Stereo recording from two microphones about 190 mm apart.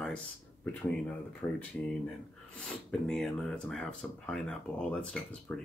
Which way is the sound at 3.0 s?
5° left (ahead or behind).